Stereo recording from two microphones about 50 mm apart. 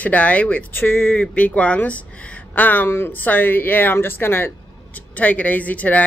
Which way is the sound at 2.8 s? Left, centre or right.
Left.